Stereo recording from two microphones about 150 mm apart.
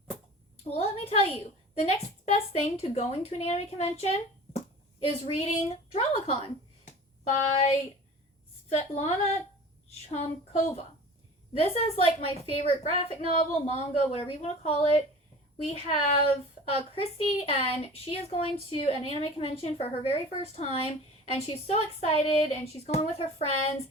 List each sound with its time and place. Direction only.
0.7 s a woman's voice: 45° left (ahead or behind)
6.8 s a sound: 50° left (ahead or behind)
8.7 s a woman's voice: 45° left (ahead or behind)